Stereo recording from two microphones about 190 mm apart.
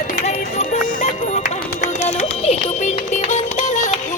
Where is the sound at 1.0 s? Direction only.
40° left (ahead or behind).